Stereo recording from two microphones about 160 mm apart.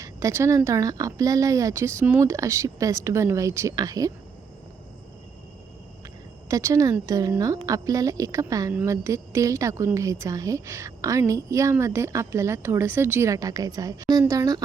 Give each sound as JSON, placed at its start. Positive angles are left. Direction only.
{"t": 0.0, "sound": "a woman's voice", "side_deg": -20}
{"t": 6.5, "sound": "a woman's voice", "side_deg": -20}